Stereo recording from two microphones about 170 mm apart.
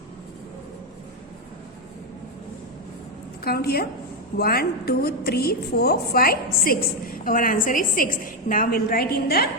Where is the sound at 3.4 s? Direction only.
65° left (ahead or behind).